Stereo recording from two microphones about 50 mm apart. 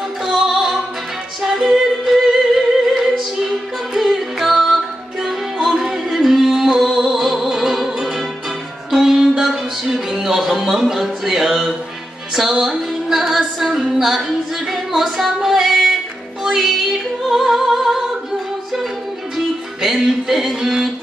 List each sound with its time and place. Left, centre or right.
0.2 s opera: centre
1.4 s music: centre
14.7 s female singing: centre
16.5 s child singing: centre
17.3 s music: centre
19.3 s music: centre